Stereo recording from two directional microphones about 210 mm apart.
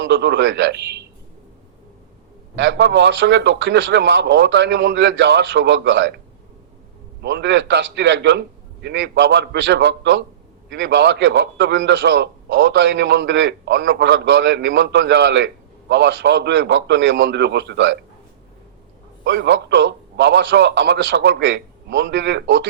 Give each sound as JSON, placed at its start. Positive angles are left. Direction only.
{"t": 0.0, "sound": "a man's voice", "side_deg": -55}
{"t": 2.6, "sound": "a man's voice", "side_deg": -55}
{"t": 7.2, "sound": "a man's voice", "side_deg": -55}
{"t": 19.2, "sound": "a man's voice", "side_deg": -55}